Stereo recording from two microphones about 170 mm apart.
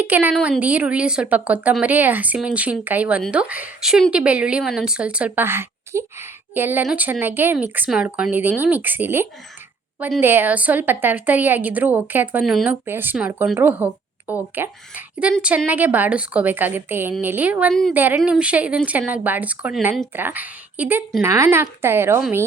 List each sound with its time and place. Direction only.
0.0 s speech: 10° right (ahead or behind)
0.3 s a woman's voice: centre (ahead or behind); by 22.2 s 15° right (ahead or behind)